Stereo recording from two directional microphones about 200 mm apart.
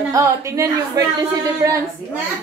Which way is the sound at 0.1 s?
15° right (ahead or behind).